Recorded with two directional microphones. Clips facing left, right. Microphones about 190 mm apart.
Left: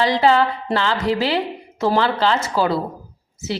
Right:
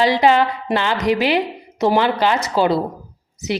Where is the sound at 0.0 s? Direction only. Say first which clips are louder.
Right 1 dB; 15° right (ahead or behind).